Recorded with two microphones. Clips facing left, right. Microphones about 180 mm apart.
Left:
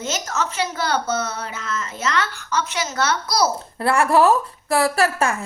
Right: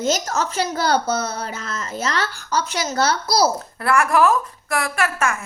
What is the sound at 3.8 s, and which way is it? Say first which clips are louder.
A woman's voice: left 1 dB; 30° left (ahead or behind).